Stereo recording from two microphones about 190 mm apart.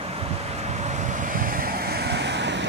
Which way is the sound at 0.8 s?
40° right (ahead or behind).